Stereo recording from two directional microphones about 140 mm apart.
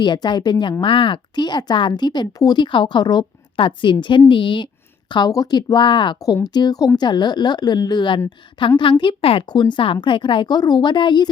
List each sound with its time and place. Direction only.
0.0 s a woman's voice: 30° left (ahead or behind)